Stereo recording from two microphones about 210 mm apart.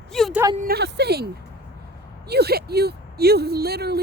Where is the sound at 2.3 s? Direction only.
50° right (ahead or behind).